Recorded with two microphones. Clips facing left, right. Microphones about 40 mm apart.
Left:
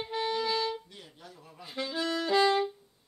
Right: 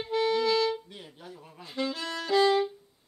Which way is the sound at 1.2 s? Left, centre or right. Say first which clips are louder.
Right 5 dB; right.